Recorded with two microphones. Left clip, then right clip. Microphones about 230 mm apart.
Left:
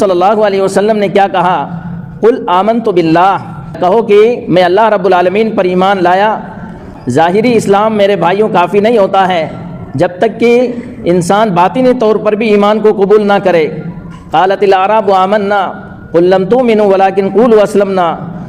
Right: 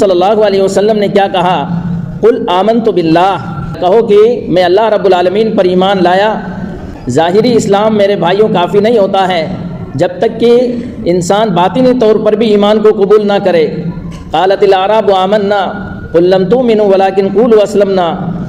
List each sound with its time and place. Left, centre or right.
0.0 s a man's voice: left